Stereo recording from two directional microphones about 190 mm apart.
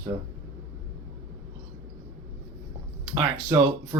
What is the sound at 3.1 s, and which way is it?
Speech, 20° right (ahead or behind).